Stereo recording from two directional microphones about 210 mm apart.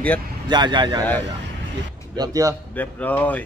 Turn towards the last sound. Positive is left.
turn(degrees=5)  # may be behind; listen again after turning